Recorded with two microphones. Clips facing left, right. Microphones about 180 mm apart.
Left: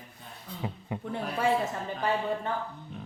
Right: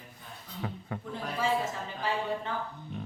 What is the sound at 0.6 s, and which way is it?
Speech, 20° left (ahead or behind).